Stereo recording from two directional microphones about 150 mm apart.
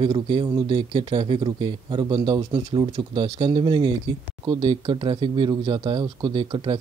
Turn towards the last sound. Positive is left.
turn(degrees=-30)  # may be behind; listen again after turning